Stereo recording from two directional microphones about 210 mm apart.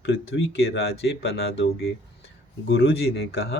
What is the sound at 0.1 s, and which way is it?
Speech, 65° left (ahead or behind).